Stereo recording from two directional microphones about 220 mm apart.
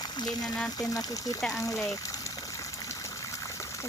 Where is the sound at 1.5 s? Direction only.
15° left (ahead or behind).